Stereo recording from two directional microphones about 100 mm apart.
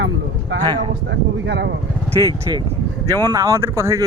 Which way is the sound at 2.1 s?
40° right (ahead or behind).